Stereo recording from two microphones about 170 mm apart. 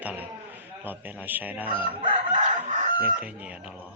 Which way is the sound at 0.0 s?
10° right (ahead or behind).